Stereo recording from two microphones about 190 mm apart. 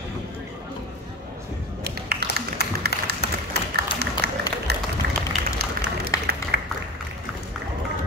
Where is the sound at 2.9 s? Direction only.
55° left (ahead or behind).